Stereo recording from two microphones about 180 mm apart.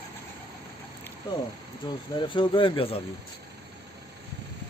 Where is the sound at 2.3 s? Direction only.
30° left (ahead or behind).